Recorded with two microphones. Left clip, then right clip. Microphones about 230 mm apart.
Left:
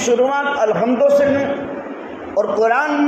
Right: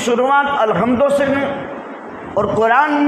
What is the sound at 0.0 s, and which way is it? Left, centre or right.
A man's voice, right.